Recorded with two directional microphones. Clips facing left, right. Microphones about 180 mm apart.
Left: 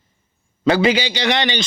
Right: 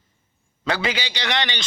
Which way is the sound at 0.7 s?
15° left (ahead or behind).